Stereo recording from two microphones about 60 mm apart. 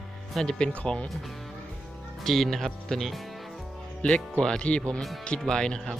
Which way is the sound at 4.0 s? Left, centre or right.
Centre.